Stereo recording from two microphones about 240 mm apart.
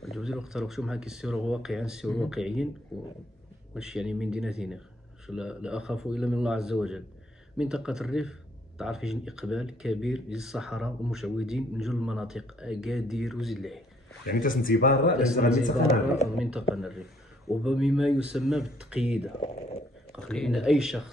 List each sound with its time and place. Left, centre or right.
0.0 s speech: centre
3.7 s speech: centre
14.2 s speech: left
16.3 s speech: centre